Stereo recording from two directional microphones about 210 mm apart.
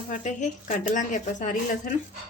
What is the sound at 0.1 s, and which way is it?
Speech, 35° left (ahead or behind).